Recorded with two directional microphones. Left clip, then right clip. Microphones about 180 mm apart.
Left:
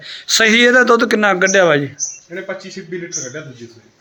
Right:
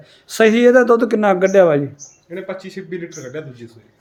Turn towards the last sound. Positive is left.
turn(degrees=-25)  # may be behind; listen again after turning